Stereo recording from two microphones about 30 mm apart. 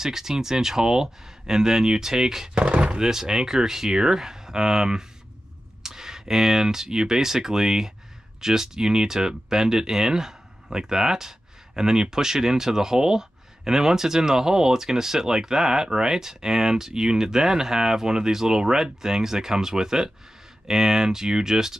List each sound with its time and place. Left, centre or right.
0.0 s speech: centre
2.5 s speech: right
3.0 s speech: centre